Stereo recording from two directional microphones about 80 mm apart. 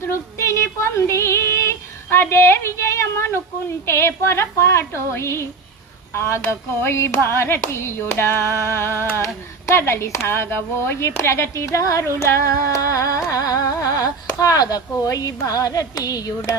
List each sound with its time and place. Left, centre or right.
0.1 s female singing: left
3.8 s speech: left
12.2 s singing: left